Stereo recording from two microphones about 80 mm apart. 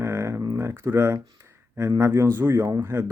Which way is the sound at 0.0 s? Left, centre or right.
Right.